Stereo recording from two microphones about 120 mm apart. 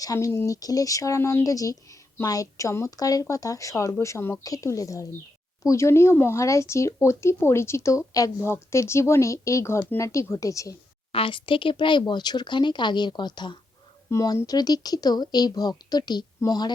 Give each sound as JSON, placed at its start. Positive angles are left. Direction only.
{"t": 0.0, "sound": "speech", "side_deg": 30}
{"t": 11.1, "sound": "speech", "side_deg": 45}
{"t": 14.1, "sound": "speech", "side_deg": 25}